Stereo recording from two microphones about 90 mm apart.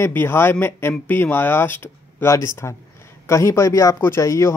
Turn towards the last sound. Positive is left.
turn(degrees=35)  # may be behind; listen again after turning